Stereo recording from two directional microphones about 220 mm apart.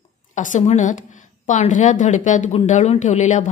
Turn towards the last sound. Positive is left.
turn(degrees=30)  # may be behind; listen again after turning